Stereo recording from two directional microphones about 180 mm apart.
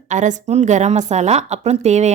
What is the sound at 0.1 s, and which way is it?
A woman's voice, 45° right (ahead or behind).